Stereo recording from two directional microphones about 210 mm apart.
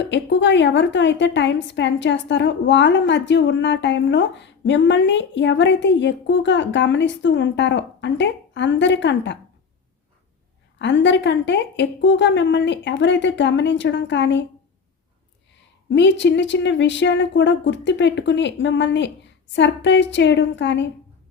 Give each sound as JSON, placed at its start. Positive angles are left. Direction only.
{"t": 0.0, "sound": "a woman's voice", "side_deg": 55}
{"t": 10.8, "sound": "a woman's voice", "side_deg": 60}
{"t": 15.9, "sound": "a woman's voice", "side_deg": 60}